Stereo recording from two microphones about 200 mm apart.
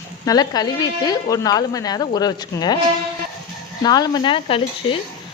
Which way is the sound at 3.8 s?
20° left (ahead or behind).